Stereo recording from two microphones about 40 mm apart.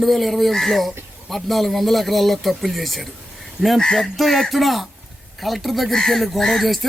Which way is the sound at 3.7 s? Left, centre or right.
Centre.